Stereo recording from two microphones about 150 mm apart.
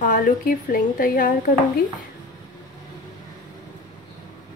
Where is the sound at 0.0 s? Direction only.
65° left (ahead or behind).